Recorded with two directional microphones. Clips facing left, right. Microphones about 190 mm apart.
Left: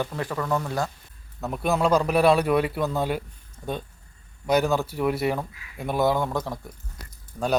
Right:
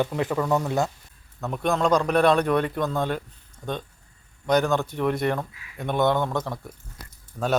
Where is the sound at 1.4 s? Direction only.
5° left (ahead or behind).